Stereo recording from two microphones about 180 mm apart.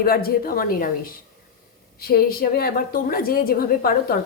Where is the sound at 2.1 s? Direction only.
55° left (ahead or behind).